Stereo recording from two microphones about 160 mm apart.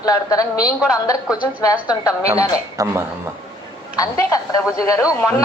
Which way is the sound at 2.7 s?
15° right (ahead or behind).